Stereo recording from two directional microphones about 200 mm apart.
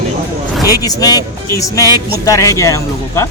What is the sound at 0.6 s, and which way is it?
Speech, 20° left (ahead or behind).